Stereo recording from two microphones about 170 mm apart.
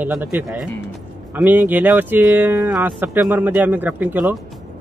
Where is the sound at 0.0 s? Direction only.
10° right (ahead or behind).